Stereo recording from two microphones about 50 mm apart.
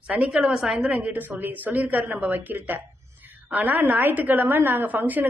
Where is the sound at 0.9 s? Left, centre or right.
Right.